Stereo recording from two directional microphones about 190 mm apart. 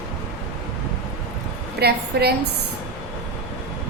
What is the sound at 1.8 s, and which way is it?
Speech, 60° right (ahead or behind).